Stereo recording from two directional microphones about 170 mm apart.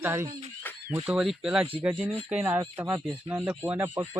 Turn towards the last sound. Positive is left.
turn(degrees=-15)  # may be behind; listen again after turning